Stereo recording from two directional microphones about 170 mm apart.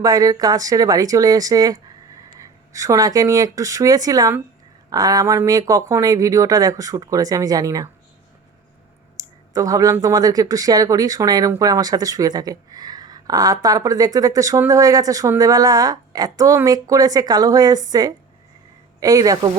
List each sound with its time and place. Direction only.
0.0 s speech: 20° right (ahead or behind)
9.1 s speech: 20° right (ahead or behind)